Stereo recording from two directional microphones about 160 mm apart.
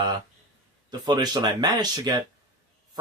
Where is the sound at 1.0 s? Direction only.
25° right (ahead or behind).